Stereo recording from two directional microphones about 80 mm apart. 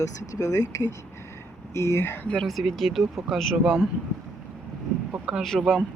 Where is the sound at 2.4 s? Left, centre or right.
Centre.